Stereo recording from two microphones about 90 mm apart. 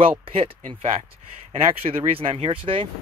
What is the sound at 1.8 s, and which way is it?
Speech, 90° right.